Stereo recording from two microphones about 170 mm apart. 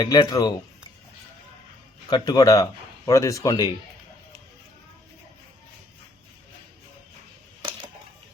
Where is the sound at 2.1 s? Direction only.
25° left (ahead or behind).